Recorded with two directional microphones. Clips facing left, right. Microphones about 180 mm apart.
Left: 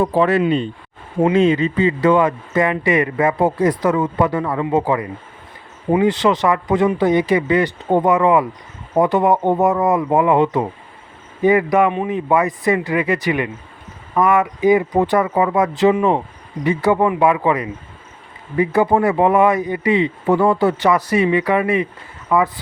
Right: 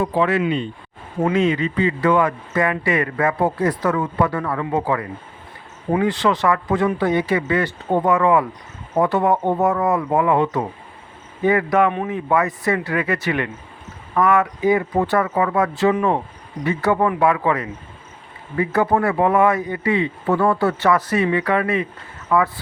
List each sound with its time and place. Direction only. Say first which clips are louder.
0.0 s speech: left 3 dB; 40° left (ahead or behind); by 22.6 s 15° left (ahead or behind)